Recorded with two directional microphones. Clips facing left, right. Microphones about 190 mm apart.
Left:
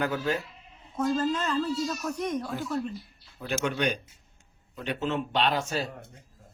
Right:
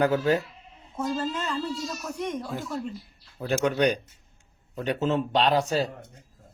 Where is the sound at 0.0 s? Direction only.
35° right (ahead or behind).